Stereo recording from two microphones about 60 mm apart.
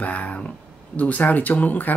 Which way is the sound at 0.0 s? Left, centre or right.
Left.